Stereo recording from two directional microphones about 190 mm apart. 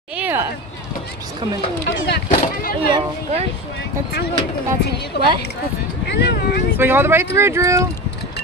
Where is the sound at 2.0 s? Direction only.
55° left (ahead or behind).